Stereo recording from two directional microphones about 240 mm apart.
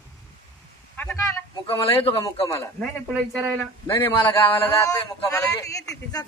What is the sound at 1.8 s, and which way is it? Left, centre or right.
Speech, left.